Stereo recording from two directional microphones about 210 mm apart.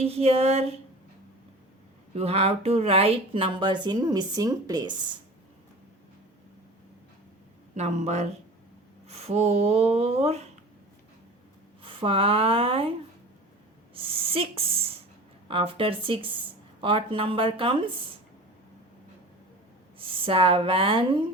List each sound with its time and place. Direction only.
0.0 s speech: 30° right (ahead or behind)
2.1 s speech: 30° right (ahead or behind)
7.8 s speech: 30° right (ahead or behind)
11.8 s speech: 25° right (ahead or behind)
13.9 s speech: 25° right (ahead or behind)
20.0 s speech: 25° right (ahead or behind)